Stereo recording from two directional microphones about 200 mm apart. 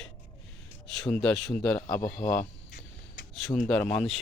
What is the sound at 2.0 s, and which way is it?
Speech, 45° left (ahead or behind).